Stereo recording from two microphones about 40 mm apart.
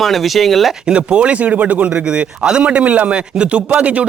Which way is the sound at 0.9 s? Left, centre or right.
Right.